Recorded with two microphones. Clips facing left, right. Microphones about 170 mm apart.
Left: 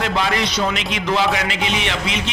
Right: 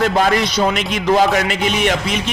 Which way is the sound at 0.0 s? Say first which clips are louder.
Right 5 dB; 45° right (ahead or behind).